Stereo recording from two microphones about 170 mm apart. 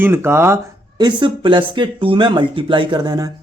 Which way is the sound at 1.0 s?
25° right (ahead or behind).